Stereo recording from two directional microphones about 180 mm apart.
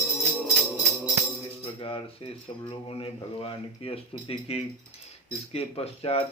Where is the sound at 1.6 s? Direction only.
30° left (ahead or behind).